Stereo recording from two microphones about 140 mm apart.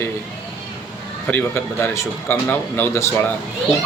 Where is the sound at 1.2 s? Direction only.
15° left (ahead or behind).